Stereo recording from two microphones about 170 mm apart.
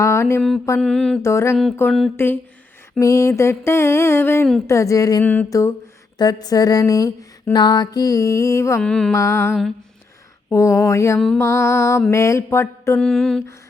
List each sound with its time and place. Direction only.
0.0 s mantra: 15° left (ahead or behind)
0.8 s mantra: 5° left (ahead or behind)
1.2 s mantra: 15° left (ahead or behind)
6.1 s a sound: 25° left (ahead or behind)
8.8 s mantra: 5° left (ahead or behind)
9.1 s mantra: 15° left (ahead or behind)
9.5 s mantra: centre (ahead or behind)
10.5 s mantra: 20° left (ahead or behind)
13.0 s mantra: centre (ahead or behind)